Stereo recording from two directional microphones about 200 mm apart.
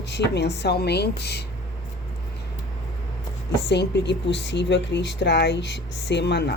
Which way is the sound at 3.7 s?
60° left (ahead or behind).